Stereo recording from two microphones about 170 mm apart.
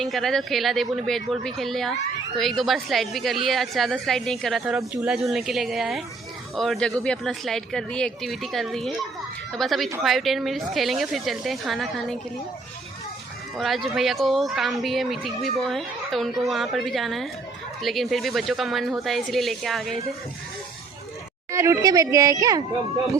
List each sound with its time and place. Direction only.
0.0 s a woman's voice: centre (ahead or behind)
13.6 s a woman's voice: centre (ahead or behind)
21.5 s speech: 15° right (ahead or behind)